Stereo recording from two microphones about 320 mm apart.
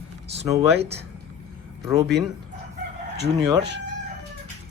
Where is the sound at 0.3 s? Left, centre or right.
Centre.